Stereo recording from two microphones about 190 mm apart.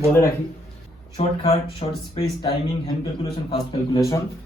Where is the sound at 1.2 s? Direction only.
30° left (ahead or behind).